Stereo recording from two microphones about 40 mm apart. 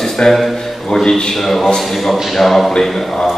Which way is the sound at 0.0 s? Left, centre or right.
Centre.